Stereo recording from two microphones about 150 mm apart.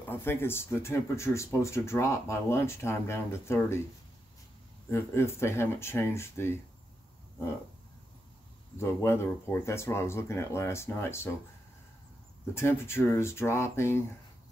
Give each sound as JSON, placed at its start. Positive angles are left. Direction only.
{"t": 0.0, "sound": "speech", "side_deg": 15}
{"t": 4.9, "sound": "speech", "side_deg": 15}
{"t": 8.7, "sound": "speech", "side_deg": 15}
{"t": 12.5, "sound": "speech", "side_deg": 15}